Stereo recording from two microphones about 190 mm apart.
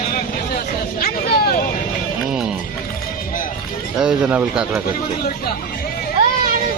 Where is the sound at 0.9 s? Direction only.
55° left (ahead or behind).